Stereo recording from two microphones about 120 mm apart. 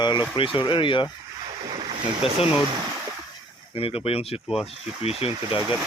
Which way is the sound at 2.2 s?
55° left (ahead or behind).